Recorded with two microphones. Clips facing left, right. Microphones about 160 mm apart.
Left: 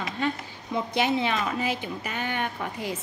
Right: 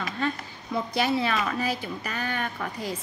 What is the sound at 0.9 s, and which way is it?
A woman's voice, 20° left (ahead or behind).